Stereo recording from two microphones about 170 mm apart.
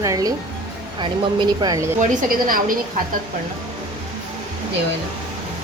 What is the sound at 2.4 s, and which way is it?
Speech, 55° right (ahead or behind).